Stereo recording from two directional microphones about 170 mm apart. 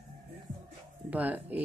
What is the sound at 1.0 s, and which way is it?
Speech, 10° right (ahead or behind).